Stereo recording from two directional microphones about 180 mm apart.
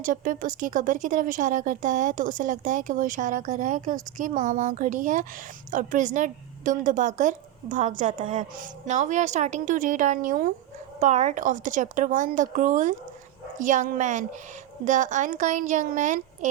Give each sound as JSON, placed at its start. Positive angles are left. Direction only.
{"t": 0.0, "sound": "speech", "side_deg": -45}